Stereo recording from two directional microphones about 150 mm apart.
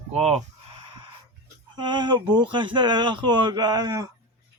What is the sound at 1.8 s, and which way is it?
Speech, 30° right (ahead or behind).